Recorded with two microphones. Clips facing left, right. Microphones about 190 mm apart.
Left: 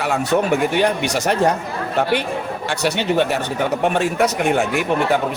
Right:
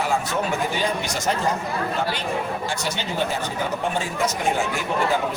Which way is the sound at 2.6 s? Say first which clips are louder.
Left 7 dB; 70° left (ahead or behind).